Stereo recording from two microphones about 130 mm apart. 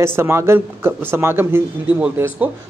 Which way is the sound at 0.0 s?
20° right (ahead or behind).